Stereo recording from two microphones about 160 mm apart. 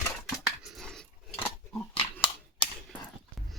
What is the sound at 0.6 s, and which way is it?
Dog, centre (ahead or behind).